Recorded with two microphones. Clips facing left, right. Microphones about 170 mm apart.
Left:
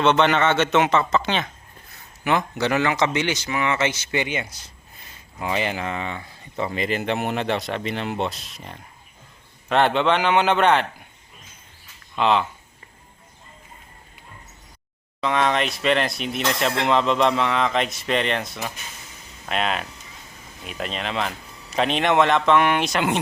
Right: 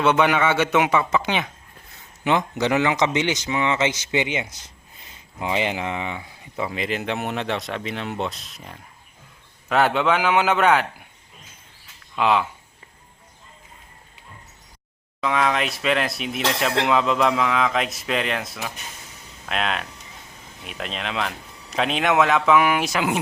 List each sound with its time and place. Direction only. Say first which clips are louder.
0.0 s a man's voice: left 1 dB; 10° right (ahead or behind)
12.1 s a man's voice: even; 5° right (ahead or behind)
15.2 s speech: left 1 dB; centre (ahead or behind)